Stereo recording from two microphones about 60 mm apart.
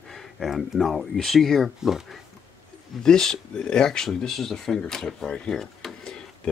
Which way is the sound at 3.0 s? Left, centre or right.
Centre.